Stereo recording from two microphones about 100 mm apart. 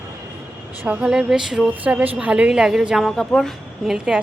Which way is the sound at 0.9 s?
10° right (ahead or behind).